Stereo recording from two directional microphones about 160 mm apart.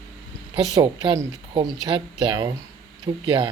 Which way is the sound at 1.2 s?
25° right (ahead or behind).